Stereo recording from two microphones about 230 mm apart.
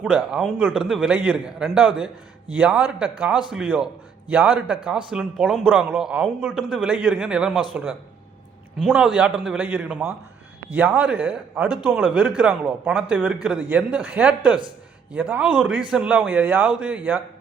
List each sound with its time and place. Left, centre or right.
0.0 s a man's voice: centre
8.8 s a man's voice: centre